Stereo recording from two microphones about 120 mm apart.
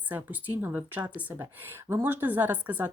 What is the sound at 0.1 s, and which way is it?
A woman's voice, 15° right (ahead or behind).